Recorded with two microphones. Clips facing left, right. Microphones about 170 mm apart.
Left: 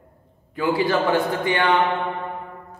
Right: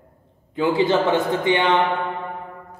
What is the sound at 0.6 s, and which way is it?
A man's voice, 20° right (ahead or behind).